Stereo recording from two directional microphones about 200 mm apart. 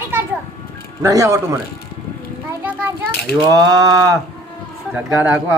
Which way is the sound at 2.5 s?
10° right (ahead or behind).